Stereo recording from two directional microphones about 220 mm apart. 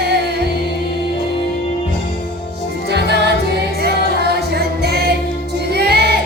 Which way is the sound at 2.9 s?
50° right (ahead or behind).